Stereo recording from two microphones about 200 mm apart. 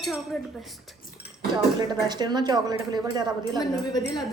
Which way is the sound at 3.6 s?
20° left (ahead or behind).